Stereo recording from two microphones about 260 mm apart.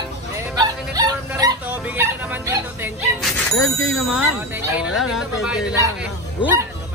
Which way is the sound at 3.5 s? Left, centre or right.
Left.